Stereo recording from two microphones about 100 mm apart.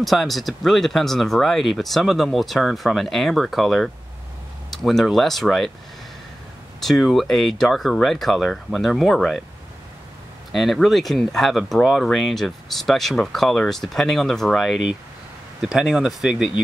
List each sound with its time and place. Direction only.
0.0 s speech: centre (ahead or behind)
6.8 s speech: centre (ahead or behind)
10.5 s speech: centre (ahead or behind)